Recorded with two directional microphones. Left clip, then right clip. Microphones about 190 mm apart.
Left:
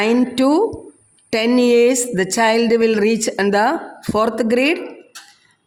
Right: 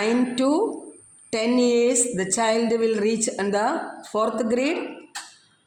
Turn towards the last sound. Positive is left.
turn(degrees=50)  # may be behind; listen again after turning